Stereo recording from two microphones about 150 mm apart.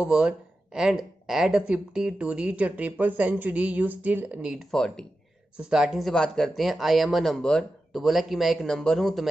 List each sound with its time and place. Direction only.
0.0 s speech: 5° right (ahead or behind)